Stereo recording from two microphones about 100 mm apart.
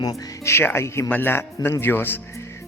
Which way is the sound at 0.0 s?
40° left (ahead or behind).